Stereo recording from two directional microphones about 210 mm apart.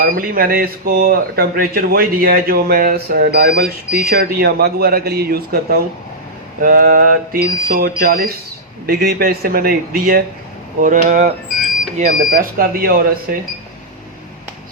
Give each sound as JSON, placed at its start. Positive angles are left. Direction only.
{"t": 0.0, "sound": "speech", "side_deg": -45}